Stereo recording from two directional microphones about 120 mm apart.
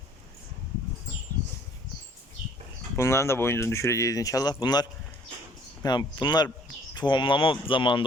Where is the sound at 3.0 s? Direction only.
20° left (ahead or behind).